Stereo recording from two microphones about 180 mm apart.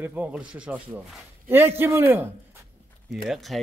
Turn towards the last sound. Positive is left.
turn(degrees=0)  # may be behind; listen again after turning